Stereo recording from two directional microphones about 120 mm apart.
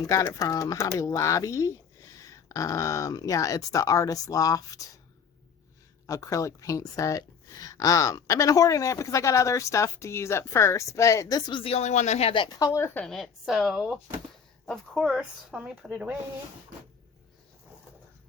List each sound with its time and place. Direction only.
0.0 s speech: 30° left (ahead or behind)
6.1 s speech: 25° left (ahead or behind)
11.6 s speech: 60° left (ahead or behind)
12.3 s speech: 40° left (ahead or behind)
12.5 s speech: 25° left (ahead or behind)
13.1 s a woman's voice: centre (ahead or behind)